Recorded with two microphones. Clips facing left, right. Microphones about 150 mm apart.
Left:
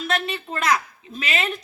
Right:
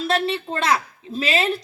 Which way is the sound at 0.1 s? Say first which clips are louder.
Right 4 dB; 30° right (ahead or behind).